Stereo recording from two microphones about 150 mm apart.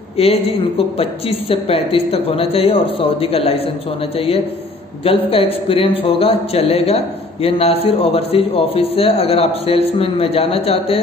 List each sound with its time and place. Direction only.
0.2 s a man's voice: 40° left (ahead or behind)
5.3 s a man's voice: 40° left (ahead or behind)